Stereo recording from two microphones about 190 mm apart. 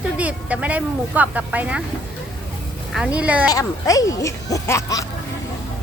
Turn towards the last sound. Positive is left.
turn(degrees=15)  # may be behind; listen again after turning